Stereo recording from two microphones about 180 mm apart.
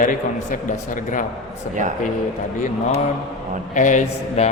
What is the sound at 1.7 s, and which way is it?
Speech, 45° left (ahead or behind).